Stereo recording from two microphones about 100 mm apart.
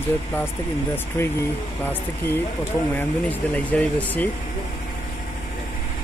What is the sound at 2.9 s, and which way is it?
Speech, 15° left (ahead or behind).